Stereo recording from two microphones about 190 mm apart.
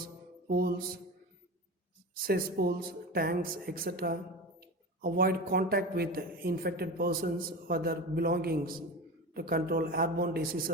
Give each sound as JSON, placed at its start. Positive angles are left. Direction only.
{"t": 0.4, "sound": "music", "side_deg": -55}
{"t": 2.2, "sound": "a man's voice", "side_deg": -50}